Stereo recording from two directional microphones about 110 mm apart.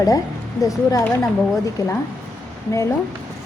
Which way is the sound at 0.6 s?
30° left (ahead or behind).